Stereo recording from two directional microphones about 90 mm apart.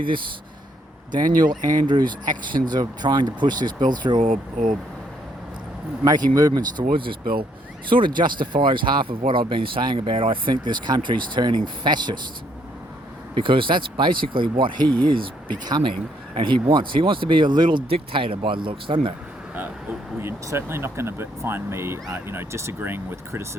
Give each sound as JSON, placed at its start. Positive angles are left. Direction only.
{"t": 1.1, "sound": "speech", "side_deg": -55}
{"t": 6.1, "sound": "speech", "side_deg": -40}
{"t": 10.5, "sound": "speech", "side_deg": -55}
{"t": 13.3, "sound": "speech", "side_deg": -70}
{"t": 20.1, "sound": "speech", "side_deg": -25}